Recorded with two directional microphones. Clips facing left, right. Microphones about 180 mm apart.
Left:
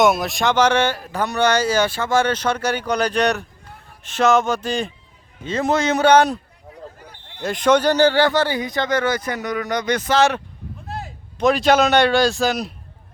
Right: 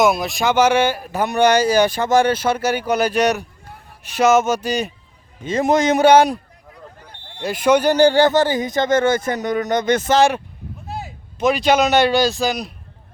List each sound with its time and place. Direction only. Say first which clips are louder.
0.0 s speech: even; centre (ahead or behind)
7.4 s speech: right 1 dB; 5° right (ahead or behind)
8.4 s speech: right 3 dB; 45° right (ahead or behind)
8.9 s speech: right 5 dB; 25° right (ahead or behind)
10.2 s speech: even; 10° right (ahead or behind)
10.8 s a man's voice: right 1 dB; centre (ahead or behind)